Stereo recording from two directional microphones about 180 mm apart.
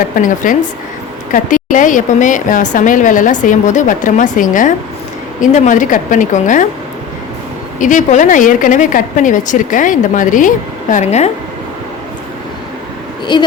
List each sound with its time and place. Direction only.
0.2 s a woman's voice: 45° left (ahead or behind)
7.8 s a woman's voice: 45° left (ahead or behind)
13.3 s a woman's voice: 25° left (ahead or behind)